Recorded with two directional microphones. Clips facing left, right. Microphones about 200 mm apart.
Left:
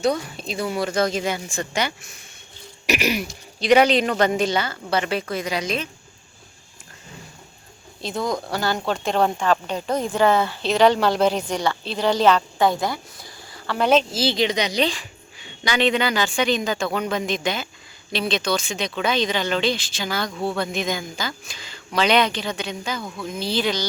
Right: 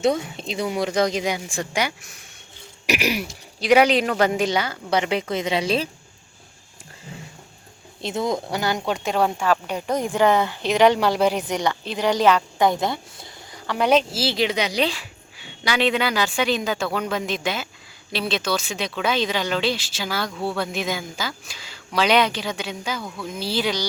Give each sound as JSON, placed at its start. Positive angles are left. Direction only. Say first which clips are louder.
{"t": 0.0, "sound": "speech", "louder": "right 1 dB", "side_deg": -20}
{"t": 8.0, "sound": "speech", "louder": "right 1 dB", "side_deg": -25}